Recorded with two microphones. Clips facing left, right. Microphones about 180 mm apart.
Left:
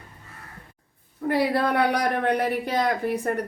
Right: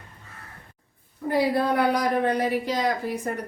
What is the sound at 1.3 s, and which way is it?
Speech, 70° left (ahead or behind).